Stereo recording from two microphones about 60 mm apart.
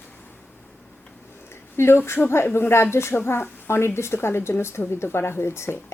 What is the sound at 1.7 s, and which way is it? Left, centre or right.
Speech, left.